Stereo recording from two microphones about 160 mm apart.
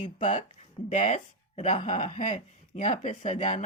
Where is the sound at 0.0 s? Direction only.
50° left (ahead or behind).